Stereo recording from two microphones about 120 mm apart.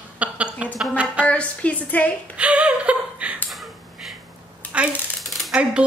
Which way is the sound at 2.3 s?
10° right (ahead or behind).